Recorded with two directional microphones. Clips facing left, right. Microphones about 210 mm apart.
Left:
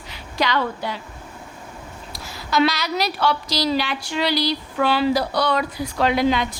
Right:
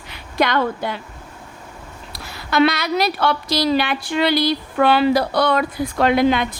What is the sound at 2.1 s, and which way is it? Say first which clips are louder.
A woman's voice: right 3 dB; 65° right (ahead or behind).